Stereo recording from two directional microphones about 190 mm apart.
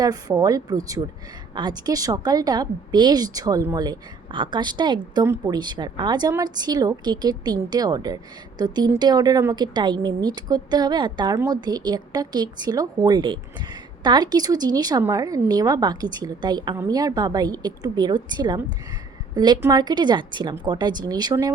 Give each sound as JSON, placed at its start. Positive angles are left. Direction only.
{"t": 0.0, "sound": "a woman's voice", "side_deg": -20}